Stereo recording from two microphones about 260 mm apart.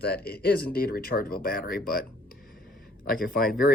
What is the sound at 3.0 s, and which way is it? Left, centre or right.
Speech, left.